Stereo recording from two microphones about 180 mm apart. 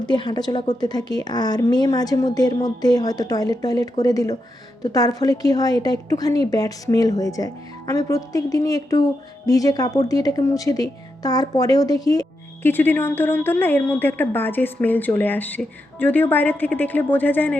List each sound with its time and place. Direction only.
0.0 s a woman's voice: 25° left (ahead or behind)